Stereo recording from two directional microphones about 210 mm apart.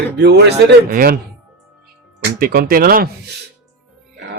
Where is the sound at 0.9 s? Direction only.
40° right (ahead or behind).